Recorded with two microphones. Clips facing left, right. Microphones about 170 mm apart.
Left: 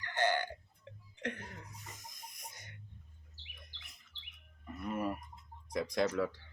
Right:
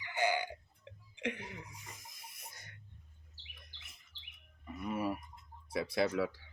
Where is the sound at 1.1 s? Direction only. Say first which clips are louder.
Right 2 dB; 10° right (ahead or behind).